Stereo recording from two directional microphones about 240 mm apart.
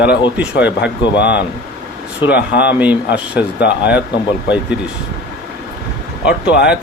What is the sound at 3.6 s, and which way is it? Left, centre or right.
Speech, left.